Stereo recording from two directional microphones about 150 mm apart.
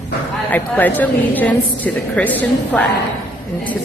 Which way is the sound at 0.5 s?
10° left (ahead or behind).